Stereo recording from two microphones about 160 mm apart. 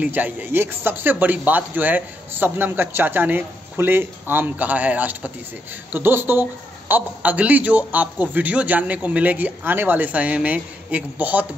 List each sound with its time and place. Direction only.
0.0 s speech: 10° right (ahead or behind)